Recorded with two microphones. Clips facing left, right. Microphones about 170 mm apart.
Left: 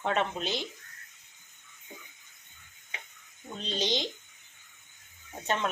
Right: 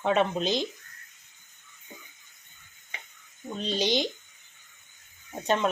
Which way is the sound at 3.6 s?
10° right (ahead or behind).